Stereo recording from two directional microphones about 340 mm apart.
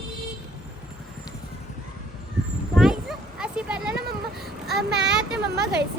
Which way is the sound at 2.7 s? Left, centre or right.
Centre.